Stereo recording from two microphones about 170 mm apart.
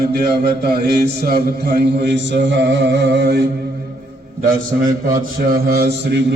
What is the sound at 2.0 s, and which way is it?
Mantra, 90° right.